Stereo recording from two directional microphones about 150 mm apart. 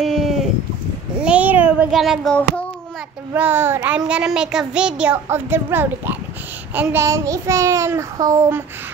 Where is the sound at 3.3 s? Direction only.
15° right (ahead or behind).